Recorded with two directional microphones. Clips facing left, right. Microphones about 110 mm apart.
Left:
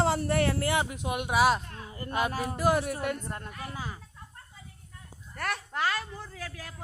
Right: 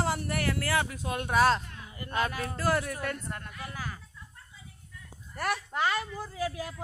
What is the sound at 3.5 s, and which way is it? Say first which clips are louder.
Speech: left 2 dB; 40° left (ahead or behind).